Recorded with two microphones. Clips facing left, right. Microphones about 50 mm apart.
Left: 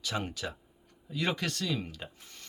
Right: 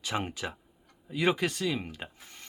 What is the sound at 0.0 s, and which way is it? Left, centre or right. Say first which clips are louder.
Speech: right 2 dB; right.